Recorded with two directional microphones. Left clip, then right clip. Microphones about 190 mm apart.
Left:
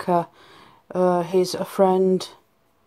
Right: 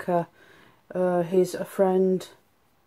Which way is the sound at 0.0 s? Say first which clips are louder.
Left 4 dB; 25° left (ahead or behind).